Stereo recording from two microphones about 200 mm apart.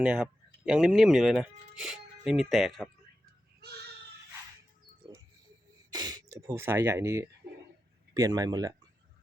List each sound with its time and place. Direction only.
0.0 s speech: 5° right (ahead or behind)
3.6 s a sound: 50° right (ahead or behind)
5.9 s a man's voice: 20° right (ahead or behind)